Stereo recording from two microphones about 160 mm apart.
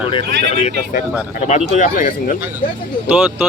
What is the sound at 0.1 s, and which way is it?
A man's voice, 40° left (ahead or behind).